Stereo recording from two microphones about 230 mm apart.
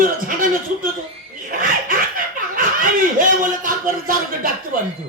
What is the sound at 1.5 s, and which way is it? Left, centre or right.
Chuckle, right.